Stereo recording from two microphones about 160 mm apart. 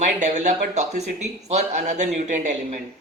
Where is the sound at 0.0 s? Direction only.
50° right (ahead or behind).